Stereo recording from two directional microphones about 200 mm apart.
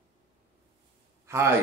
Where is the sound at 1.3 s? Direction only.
15° right (ahead or behind).